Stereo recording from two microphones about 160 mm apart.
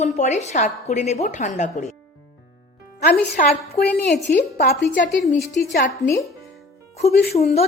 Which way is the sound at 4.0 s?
90° left.